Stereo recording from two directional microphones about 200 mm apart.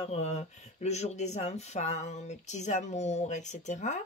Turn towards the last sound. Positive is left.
turn(degrees=35)  # may be behind; listen again after turning